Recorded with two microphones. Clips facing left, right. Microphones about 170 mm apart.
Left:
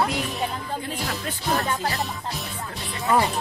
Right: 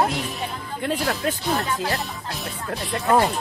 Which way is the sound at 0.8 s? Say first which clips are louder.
Right 6 dB; 70° right (ahead or behind).